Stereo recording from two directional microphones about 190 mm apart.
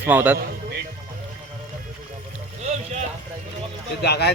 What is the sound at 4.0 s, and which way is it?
Speech, 60° left (ahead or behind).